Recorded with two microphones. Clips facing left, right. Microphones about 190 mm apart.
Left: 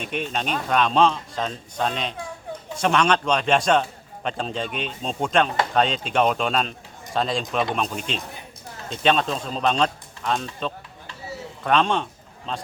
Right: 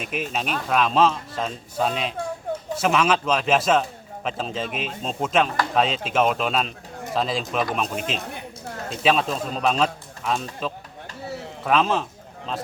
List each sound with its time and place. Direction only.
0.0 s speech: 5° right (ahead or behind)